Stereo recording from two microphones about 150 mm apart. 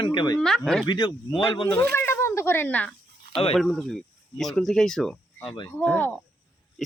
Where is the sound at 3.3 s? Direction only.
40° left (ahead or behind).